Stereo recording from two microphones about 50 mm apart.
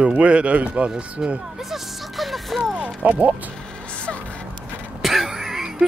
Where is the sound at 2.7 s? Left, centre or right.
Right.